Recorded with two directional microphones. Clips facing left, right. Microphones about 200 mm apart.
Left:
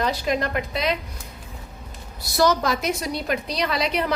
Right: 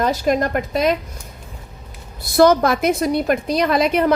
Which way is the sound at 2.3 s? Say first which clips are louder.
Right 7 dB; 55° right (ahead or behind).